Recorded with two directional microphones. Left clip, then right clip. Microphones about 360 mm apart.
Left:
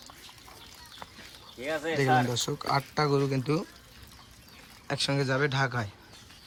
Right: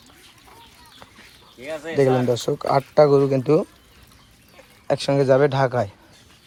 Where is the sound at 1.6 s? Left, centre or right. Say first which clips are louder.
Right 1 dB; left.